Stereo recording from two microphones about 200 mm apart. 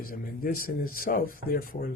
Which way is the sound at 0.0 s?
45° left (ahead or behind).